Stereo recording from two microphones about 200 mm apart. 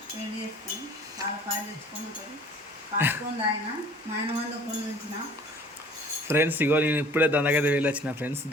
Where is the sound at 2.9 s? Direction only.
10° right (ahead or behind).